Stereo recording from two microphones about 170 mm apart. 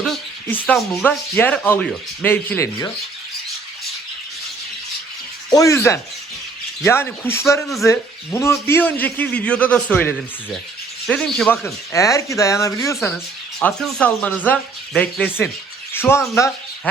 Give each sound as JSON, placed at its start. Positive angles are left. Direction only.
{"t": 0.0, "sound": "speech", "side_deg": 5}
{"t": 5.5, "sound": "speech", "side_deg": 20}
{"t": 13.8, "sound": "speech", "side_deg": 5}